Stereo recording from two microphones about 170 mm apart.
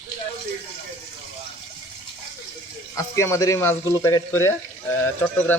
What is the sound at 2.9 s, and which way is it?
Speech, 15° left (ahead or behind).